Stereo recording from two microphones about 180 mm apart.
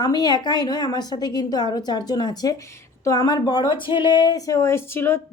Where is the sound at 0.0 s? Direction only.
20° left (ahead or behind).